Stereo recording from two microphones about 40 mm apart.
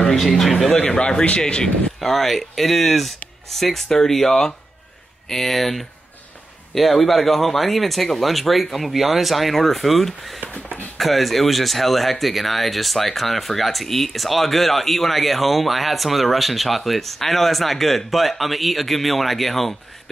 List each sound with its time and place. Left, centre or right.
0.0 s speech: centre
0.7 s speech: left
2.0 s speech: centre
10.4 s a sound: left
11.0 s speech: centre